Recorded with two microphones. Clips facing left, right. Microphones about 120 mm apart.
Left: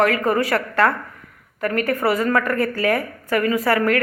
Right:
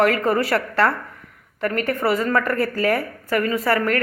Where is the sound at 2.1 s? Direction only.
30° right (ahead or behind).